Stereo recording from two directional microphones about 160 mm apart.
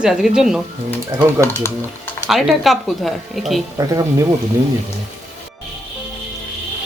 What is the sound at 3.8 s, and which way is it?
Speech, 20° right (ahead or behind).